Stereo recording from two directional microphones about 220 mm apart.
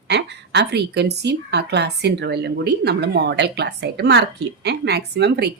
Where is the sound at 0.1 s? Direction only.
50° right (ahead or behind).